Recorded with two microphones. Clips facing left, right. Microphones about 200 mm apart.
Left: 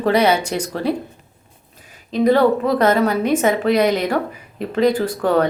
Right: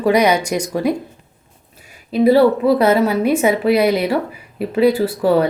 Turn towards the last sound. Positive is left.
turn(degrees=-5)  # may be behind; listen again after turning